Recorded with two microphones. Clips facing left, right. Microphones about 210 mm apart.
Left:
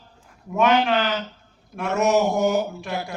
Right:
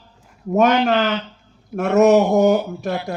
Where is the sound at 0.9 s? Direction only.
40° right (ahead or behind).